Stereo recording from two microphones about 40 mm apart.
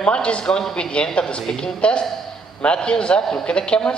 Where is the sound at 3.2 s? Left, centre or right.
Centre.